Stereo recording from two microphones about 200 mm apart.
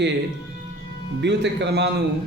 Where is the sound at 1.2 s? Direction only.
60° right (ahead or behind).